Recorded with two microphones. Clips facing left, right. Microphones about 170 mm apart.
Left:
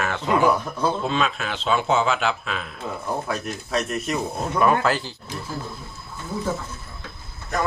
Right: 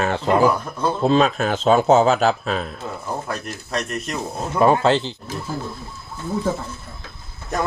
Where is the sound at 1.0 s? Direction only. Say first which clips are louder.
Right 7 dB; 35° right (ahead or behind).